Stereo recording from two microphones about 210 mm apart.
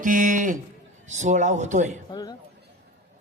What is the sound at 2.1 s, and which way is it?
Speech, 20° left (ahead or behind).